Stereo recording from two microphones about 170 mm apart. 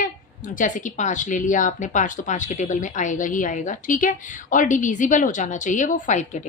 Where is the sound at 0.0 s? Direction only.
50° left (ahead or behind).